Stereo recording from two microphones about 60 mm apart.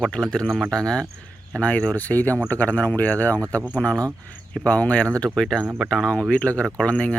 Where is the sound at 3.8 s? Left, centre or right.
Centre.